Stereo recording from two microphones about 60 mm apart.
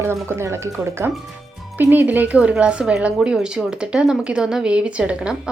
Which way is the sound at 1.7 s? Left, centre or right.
Right.